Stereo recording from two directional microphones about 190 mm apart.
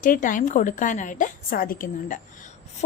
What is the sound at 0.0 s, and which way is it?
A woman's voice, 45° left (ahead or behind).